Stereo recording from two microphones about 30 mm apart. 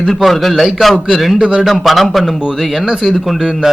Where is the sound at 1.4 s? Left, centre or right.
Right.